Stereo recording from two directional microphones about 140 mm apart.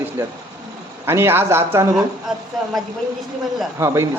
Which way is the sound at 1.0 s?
15° right (ahead or behind).